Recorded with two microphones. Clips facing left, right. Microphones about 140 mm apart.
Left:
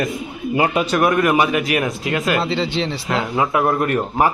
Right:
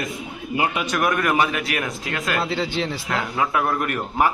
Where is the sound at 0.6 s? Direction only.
35° left (ahead or behind).